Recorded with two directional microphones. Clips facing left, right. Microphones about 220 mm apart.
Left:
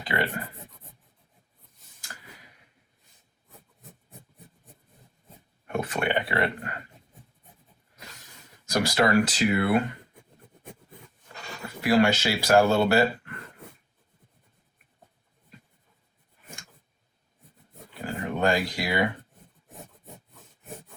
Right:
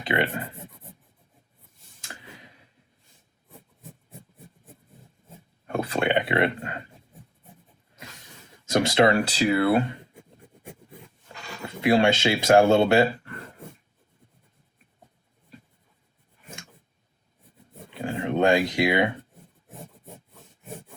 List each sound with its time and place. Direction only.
0.1 s speech: 25° right (ahead or behind)
2.0 s tick-tock: 25° right (ahead or behind)
5.6 s a sound: 30° right (ahead or behind)
8.7 s speech: 25° right (ahead or behind)
10.2 s writing: 10° right (ahead or behind)
11.6 s speech: 25° right (ahead or behind)
17.9 s dog: 25° right (ahead or behind)